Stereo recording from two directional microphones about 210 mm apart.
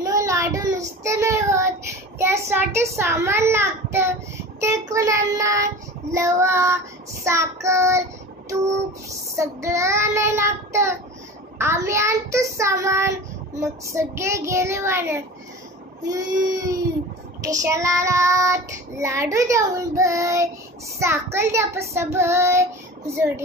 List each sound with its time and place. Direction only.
0.0 s child singing: 15° right (ahead or behind)
9.4 s child singing: 15° right (ahead or behind)